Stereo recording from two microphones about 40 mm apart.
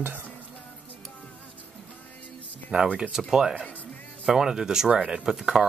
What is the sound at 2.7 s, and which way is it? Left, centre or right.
Speech, right.